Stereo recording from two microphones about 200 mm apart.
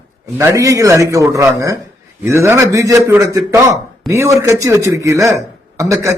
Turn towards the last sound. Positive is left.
turn(degrees=-15)  # may be behind; listen again after turning